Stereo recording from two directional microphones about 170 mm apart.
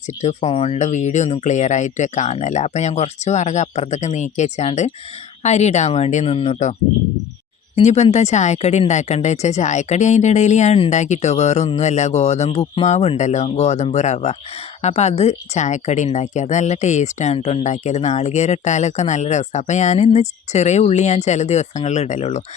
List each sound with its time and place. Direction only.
0.2 s a woman's voice: 40° left (ahead or behind)
7.8 s a woman's voice: 40° left (ahead or behind)